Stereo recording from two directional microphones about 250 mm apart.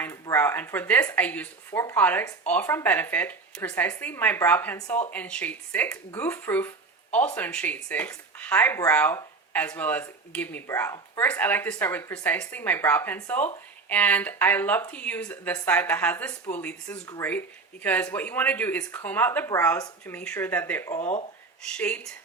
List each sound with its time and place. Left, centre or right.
0.0 s speech: centre
21.0 s speech: left
21.6 s speech: centre